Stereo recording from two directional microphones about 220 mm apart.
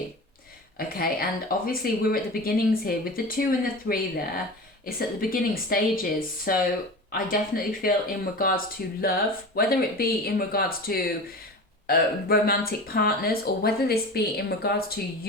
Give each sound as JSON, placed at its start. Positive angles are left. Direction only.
{"t": 0.8, "sound": "a woman's voice", "side_deg": 40}